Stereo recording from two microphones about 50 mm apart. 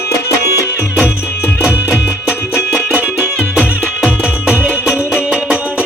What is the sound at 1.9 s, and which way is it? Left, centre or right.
Music, right.